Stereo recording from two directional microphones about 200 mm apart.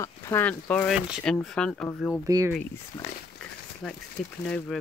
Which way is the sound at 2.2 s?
15° right (ahead or behind).